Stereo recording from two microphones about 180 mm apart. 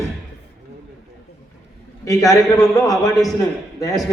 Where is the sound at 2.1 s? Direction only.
20° left (ahead or behind).